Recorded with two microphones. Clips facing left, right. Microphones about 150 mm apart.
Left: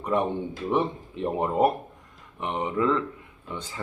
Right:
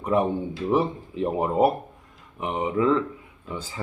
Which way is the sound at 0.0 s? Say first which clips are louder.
Right 3 dB; 5° right (ahead or behind).